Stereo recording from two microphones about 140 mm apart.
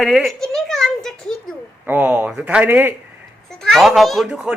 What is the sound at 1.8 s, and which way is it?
Speech, 15° right (ahead or behind).